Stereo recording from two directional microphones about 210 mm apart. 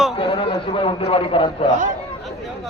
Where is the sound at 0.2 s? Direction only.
25° left (ahead or behind).